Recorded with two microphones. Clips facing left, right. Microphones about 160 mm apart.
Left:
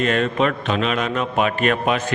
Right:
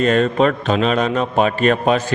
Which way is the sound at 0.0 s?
35° right (ahead or behind).